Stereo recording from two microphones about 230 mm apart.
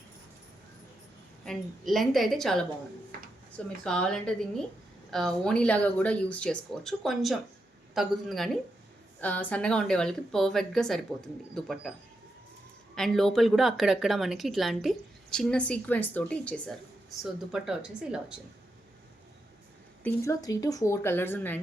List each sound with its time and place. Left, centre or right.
1.5 s a woman's voice: centre
3.8 s a woman's voice: centre
13.0 s a woman's voice: centre
20.1 s a woman's voice: centre